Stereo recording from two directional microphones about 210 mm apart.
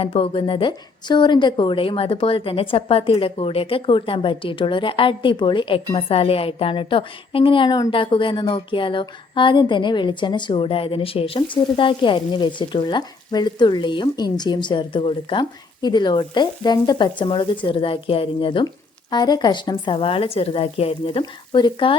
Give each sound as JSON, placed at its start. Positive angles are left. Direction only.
{"t": 0.0, "sound": "a woman's voice", "side_deg": 25}